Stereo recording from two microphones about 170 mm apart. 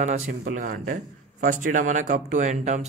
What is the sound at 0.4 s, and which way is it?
A man's voice, 50° right (ahead or behind).